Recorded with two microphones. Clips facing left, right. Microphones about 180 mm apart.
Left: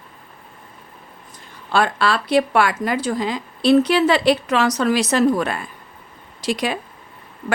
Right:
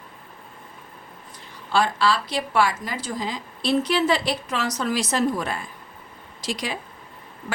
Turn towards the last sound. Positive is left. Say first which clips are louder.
# left 7 dB
turn(degrees=60)  # may be behind; listen again after turning